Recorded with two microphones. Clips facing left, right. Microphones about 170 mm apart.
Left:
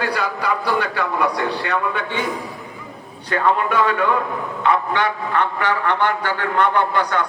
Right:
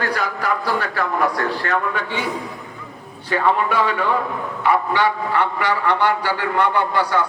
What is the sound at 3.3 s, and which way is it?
A man's voice, 10° right (ahead or behind).